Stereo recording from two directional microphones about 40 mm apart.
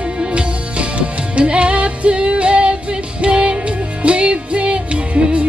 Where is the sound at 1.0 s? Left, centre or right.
Right.